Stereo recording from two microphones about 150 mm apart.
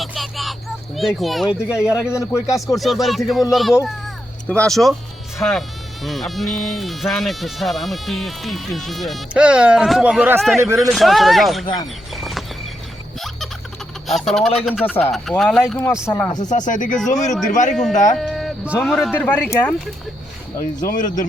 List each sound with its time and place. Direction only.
0.0 s vehicle: centre (ahead or behind)
0.9 s speech: centre (ahead or behind)
2.1 s speech: 20° left (ahead or behind)
2.7 s speech: centre (ahead or behind)
3.8 s children playing: 5° left (ahead or behind)
4.7 s speech: centre (ahead or behind)
12.1 s a sound: centre (ahead or behind)
13.1 s music: centre (ahead or behind)
14.1 s speech: centre (ahead or behind)
16.4 s speech: 55° left (ahead or behind)
18.2 s speech: centre (ahead or behind)
19.1 s speech: 10° left (ahead or behind)
20.8 s speech: 60° left (ahead or behind)